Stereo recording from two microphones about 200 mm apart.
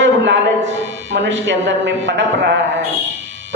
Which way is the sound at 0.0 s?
65° right (ahead or behind).